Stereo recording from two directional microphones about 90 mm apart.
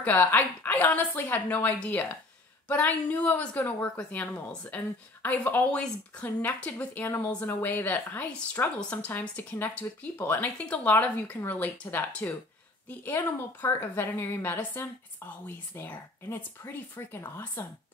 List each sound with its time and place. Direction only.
0.0 s a woman's voice: 20° left (ahead or behind)
13.7 s a woman's voice: 25° left (ahead or behind)